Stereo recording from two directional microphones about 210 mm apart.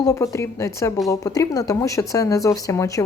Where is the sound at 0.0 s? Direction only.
15° left (ahead or behind).